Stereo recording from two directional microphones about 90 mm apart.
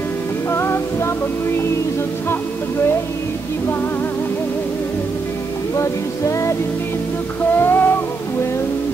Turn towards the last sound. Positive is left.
turn(degrees=25)  # may be behind; listen again after turning